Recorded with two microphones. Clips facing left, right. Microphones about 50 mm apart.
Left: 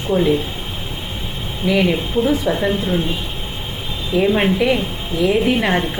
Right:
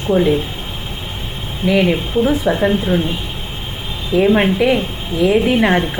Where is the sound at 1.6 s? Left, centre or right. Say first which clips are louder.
Right 2 dB; centre.